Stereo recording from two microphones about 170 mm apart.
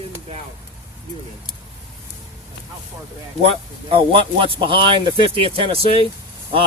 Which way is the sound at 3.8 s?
30° right (ahead or behind).